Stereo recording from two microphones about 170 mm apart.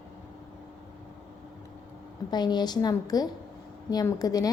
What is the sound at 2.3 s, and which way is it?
A woman's voice, 25° left (ahead or behind).